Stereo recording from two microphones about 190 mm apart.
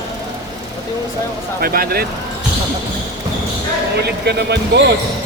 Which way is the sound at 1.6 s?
50° right (ahead or behind).